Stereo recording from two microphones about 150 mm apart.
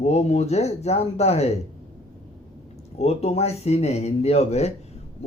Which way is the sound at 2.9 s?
45° left (ahead or behind).